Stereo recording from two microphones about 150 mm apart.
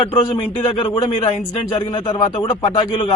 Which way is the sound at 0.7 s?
30° left (ahead or behind).